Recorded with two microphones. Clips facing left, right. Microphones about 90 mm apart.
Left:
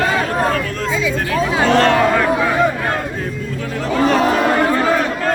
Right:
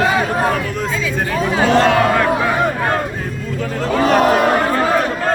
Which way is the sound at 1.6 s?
5° right (ahead or behind).